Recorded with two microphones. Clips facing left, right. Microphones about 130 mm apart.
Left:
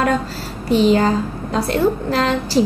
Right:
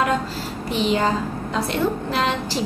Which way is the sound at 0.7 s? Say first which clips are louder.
Left 8 dB; 35° left (ahead or behind).